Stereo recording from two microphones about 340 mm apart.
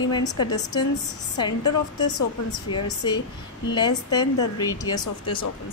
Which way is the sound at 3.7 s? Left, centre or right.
Centre.